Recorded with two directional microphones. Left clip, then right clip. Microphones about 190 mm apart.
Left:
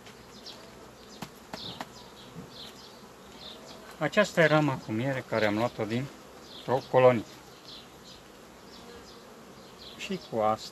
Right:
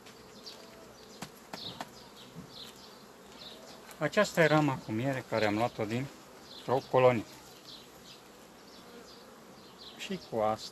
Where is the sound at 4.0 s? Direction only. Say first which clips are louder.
Left 3 dB; 20° right (ahead or behind).